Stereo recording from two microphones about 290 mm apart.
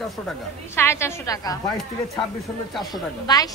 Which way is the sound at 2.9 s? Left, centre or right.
Centre.